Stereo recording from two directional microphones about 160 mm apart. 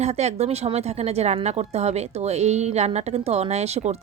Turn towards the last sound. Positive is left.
turn(degrees=-40)  # may be behind; listen again after turning